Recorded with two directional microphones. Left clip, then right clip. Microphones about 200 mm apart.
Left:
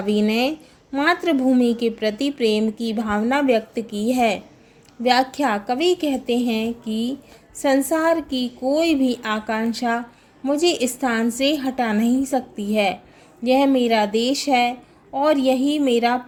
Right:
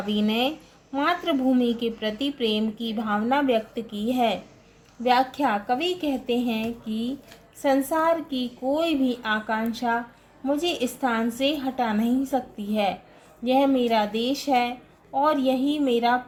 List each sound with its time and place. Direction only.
0.0 s speech: 35° left (ahead or behind)